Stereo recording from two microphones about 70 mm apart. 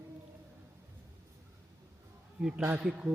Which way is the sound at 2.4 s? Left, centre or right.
Centre.